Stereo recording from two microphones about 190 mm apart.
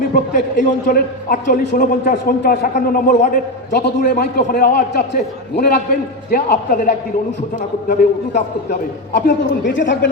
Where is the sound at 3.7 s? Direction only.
60° left (ahead or behind).